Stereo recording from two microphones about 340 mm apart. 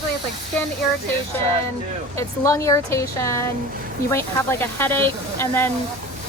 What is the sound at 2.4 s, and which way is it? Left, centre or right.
Speech, centre.